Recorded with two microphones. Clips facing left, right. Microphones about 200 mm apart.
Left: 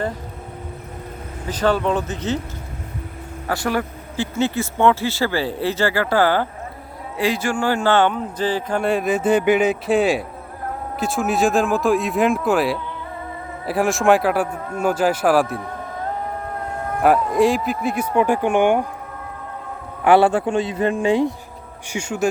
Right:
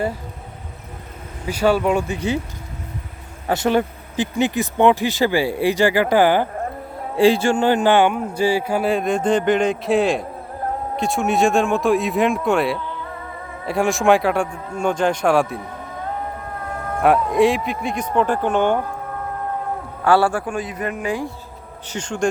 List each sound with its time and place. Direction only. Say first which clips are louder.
1.5 s speech: right 2 dB; 10° right (ahead or behind)
3.4 s speech: right 4 dB; 20° right (ahead or behind)
7.2 s speech: right 6 dB; 30° right (ahead or behind); by 15.6 s centre (ahead or behind)
17.0 s speech: even; centre (ahead or behind)
20.1 s speech: left 3 dB; 20° left (ahead or behind)
21.8 s speech: even; 10° left (ahead or behind)